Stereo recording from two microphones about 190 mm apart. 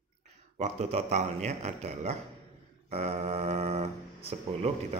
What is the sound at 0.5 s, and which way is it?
Speech, 35° right (ahead or behind).